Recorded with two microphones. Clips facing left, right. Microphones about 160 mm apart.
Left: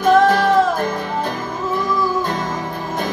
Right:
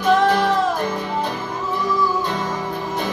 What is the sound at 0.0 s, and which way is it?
Music, 45° left (ahead or behind).